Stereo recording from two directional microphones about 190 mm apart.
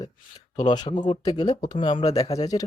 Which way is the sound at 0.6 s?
20° left (ahead or behind).